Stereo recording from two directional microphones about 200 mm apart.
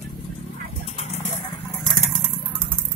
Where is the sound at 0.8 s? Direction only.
35° left (ahead or behind).